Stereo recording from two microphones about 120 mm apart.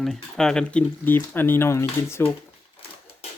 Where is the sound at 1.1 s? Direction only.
15° left (ahead or behind).